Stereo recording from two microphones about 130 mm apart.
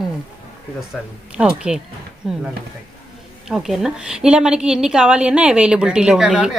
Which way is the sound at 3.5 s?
Centre (ahead or behind).